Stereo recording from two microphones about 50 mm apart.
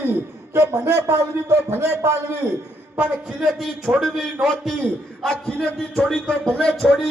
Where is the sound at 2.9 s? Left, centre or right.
Right.